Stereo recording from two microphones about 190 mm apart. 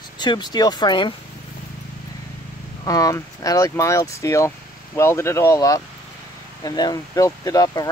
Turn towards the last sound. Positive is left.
turn(degrees=20)  # may be behind; listen again after turning